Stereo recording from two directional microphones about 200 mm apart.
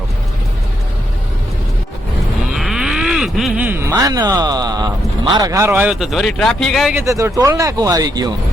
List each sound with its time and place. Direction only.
2.6 s a sound: centre (ahead or behind); by 4.9 s 20° right (ahead or behind)
5.3 s a man's voice: 15° right (ahead or behind); by 6.9 s centre (ahead or behind)
6.9 s speech: 15° right (ahead or behind)